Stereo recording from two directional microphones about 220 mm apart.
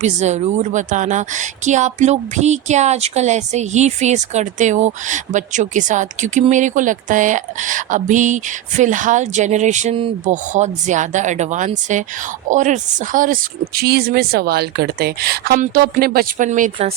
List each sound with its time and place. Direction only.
0.0 s a woman's voice: 30° right (ahead or behind)